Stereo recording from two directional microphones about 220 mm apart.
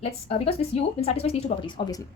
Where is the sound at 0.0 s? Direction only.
30° left (ahead or behind).